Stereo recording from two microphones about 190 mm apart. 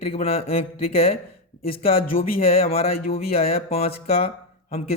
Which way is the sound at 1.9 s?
50° left (ahead or behind).